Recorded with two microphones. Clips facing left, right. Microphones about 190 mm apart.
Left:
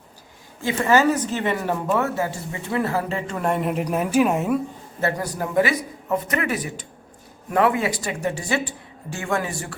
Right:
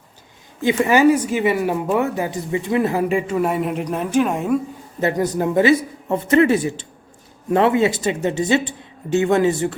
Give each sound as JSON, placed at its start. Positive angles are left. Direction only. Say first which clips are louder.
{"t": 0.6, "sound": "speech", "louder": "right 4 dB", "side_deg": -15}
{"t": 4.9, "sound": "speech", "louder": "right 6 dB", "side_deg": -20}